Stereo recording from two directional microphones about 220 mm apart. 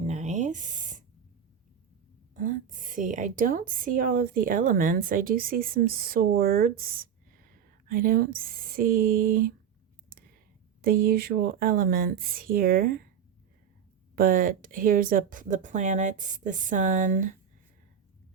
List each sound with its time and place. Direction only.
0.0 s a sound: 30° right (ahead or behind)
2.3 s a woman's voice: 35° right (ahead or behind)
10.8 s a woman's voice: 40° right (ahead or behind)
14.2 s a woman's voice: 40° right (ahead or behind)